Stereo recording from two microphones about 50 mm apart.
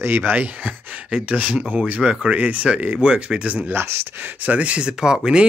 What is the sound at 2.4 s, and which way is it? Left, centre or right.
Speech, right.